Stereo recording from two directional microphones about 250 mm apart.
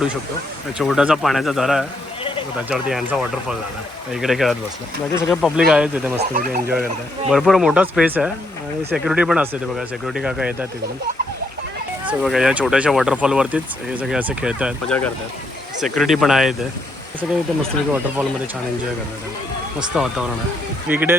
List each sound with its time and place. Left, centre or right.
0.8 s speech: centre
6.1 s speech: right
7.3 s speech: centre
12.0 s speech: centre
19.9 s speech: centre